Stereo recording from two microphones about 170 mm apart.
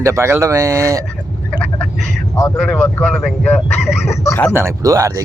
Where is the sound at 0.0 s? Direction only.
15° right (ahead or behind).